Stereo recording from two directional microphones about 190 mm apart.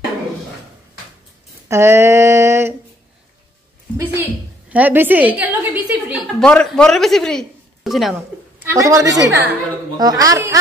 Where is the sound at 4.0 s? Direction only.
10° right (ahead or behind).